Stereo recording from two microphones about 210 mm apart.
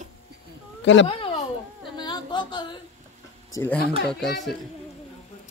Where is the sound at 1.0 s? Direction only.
25° left (ahead or behind).